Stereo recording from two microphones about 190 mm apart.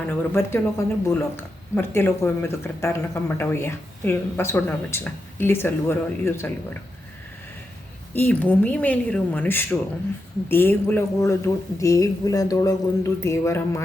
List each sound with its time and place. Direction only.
0.0 s speech: 10° left (ahead or behind)
8.1 s speech: 10° left (ahead or behind)